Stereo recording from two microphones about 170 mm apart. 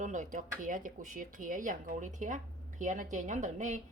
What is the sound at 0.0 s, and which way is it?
Speech, 45° right (ahead or behind).